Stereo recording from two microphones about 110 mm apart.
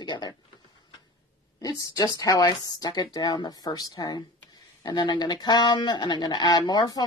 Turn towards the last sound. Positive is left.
turn(degrees=40)  # may be behind; listen again after turning